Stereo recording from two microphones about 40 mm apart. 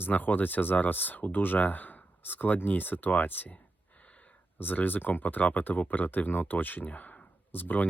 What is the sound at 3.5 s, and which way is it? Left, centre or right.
Gasp, left.